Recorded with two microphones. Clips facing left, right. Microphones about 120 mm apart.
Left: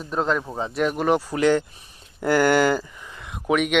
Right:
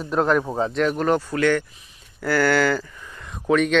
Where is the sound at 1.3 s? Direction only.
20° left (ahead or behind).